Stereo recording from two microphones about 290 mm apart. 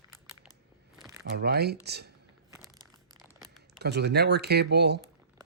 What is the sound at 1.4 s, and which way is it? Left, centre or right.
Speech, right.